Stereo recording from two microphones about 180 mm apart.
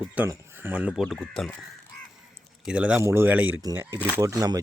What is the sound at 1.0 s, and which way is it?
Speech, 5° left (ahead or behind).